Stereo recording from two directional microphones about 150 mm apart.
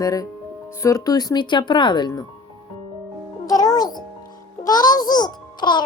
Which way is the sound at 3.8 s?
25° left (ahead or behind).